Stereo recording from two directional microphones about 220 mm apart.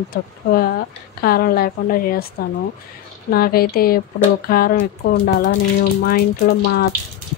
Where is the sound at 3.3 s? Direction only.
45° left (ahead or behind).